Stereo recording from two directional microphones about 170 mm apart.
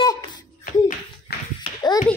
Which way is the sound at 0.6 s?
55° left (ahead or behind).